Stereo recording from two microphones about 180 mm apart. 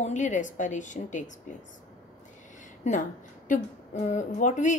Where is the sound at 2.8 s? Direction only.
45° left (ahead or behind).